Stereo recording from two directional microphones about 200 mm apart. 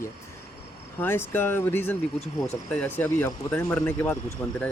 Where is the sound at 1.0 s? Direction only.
10° left (ahead or behind).